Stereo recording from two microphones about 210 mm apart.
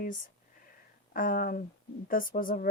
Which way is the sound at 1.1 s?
40° left (ahead or behind).